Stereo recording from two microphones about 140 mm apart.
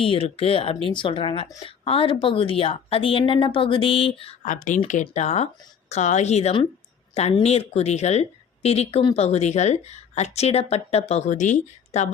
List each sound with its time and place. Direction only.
0.0 s a woman's voice: 45° left (ahead or behind)
4.4 s speech: 65° left (ahead or behind)
5.1 s speech: 55° left (ahead or behind)